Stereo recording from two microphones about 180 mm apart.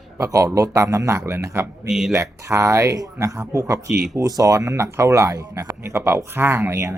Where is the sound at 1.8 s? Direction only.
Centre (ahead or behind).